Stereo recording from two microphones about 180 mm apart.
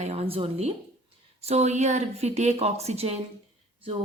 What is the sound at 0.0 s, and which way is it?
Speech, 35° right (ahead or behind).